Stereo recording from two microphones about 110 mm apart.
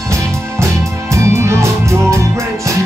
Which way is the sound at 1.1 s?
25° right (ahead or behind).